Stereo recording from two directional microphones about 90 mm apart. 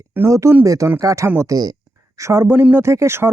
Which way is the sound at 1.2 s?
25° right (ahead or behind).